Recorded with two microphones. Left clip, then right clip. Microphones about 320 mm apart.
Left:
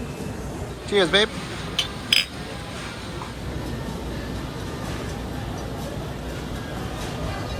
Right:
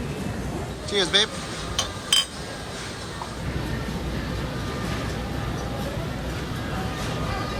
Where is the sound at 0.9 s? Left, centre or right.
Centre.